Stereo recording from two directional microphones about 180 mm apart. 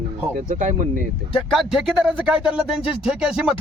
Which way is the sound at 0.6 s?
45° right (ahead or behind).